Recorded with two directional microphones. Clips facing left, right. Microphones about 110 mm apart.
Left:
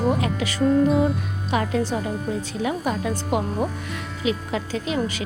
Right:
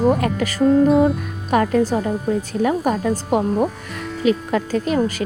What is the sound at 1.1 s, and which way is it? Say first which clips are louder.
Speech: right 5 dB; 50° right (ahead or behind).